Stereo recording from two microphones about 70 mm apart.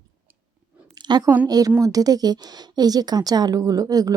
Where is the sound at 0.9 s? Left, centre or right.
Right.